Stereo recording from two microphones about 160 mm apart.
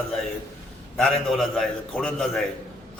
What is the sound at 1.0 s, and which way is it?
A man's voice, 5° left (ahead or behind).